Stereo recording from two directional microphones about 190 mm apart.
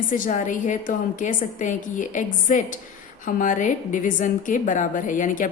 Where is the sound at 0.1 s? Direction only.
40° left (ahead or behind).